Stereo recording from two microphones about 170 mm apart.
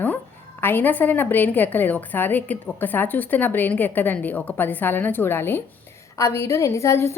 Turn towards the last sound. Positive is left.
turn(degrees=15)  # may be behind; listen again after turning